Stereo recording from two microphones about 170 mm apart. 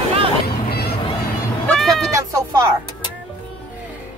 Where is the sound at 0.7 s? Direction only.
70° left (ahead or behind).